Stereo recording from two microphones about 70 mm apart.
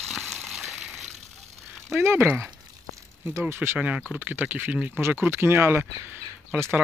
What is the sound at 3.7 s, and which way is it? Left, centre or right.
Speech, centre.